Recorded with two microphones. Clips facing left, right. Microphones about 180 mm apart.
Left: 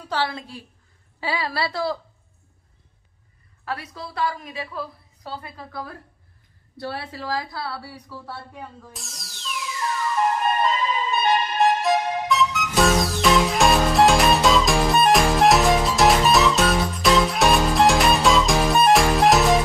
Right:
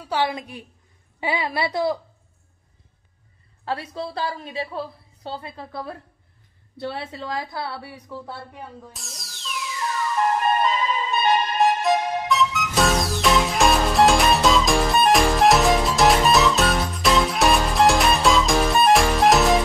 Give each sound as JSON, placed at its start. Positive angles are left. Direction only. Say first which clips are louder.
{"t": 0.1, "sound": "a woman's voice", "louder": "right 2 dB", "side_deg": -15}
{"t": 3.6, "sound": "a woman's voice", "louder": "right 4 dB", "side_deg": -30}
{"t": 8.9, "sound": "music", "louder": "left 1 dB", "side_deg": 0}
{"t": 10.6, "sound": "music", "louder": "even", "side_deg": 0}